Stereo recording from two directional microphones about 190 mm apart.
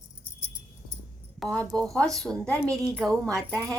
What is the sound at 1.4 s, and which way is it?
A woman's voice, centre (ahead or behind).